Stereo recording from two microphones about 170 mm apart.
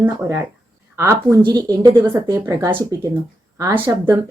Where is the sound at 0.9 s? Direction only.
15° right (ahead or behind).